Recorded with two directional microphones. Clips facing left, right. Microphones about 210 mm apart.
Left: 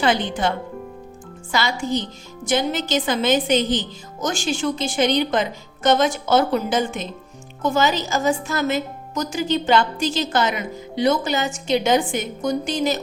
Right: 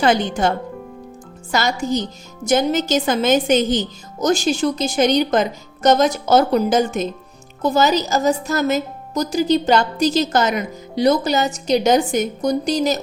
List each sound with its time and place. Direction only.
0.0 s a woman's voice: 45° right (ahead or behind)